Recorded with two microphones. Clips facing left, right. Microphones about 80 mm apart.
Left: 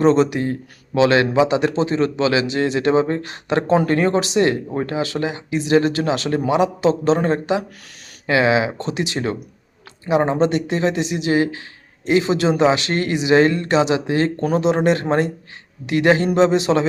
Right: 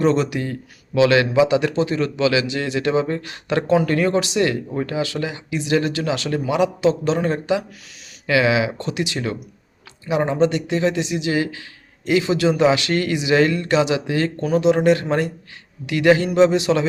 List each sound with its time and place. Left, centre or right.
0.0 s a man's voice: left